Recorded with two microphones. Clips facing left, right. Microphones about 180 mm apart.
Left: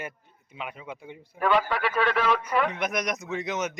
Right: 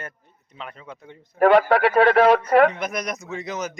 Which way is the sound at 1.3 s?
55° right (ahead or behind).